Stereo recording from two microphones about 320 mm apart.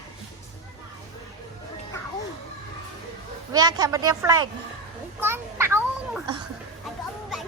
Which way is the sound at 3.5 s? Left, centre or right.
Centre.